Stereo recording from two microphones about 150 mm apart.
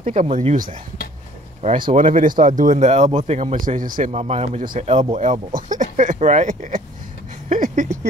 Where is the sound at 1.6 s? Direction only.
45° right (ahead or behind).